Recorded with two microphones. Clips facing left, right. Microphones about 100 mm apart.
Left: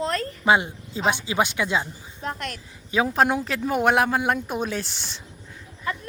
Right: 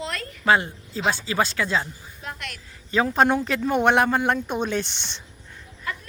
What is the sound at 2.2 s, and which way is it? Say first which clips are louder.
Speech: left 5 dB; 40° left (ahead or behind).